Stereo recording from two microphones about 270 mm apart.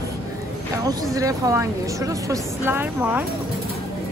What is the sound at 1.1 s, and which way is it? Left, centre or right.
A woman's voice, centre.